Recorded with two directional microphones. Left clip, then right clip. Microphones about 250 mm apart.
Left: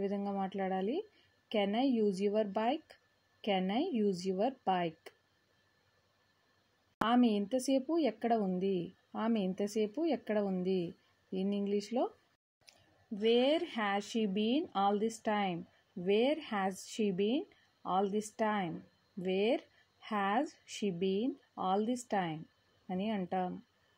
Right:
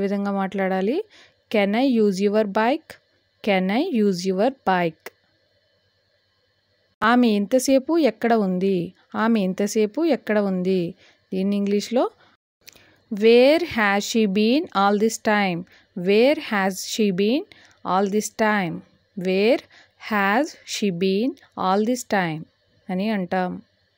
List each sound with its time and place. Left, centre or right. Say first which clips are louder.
0.0 s speech: right 12 dB; right
7.1 s speech: right 13 dB; right
13.1 s speech: right 15 dB; right